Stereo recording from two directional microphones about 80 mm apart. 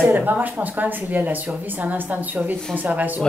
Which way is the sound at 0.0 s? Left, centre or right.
Right.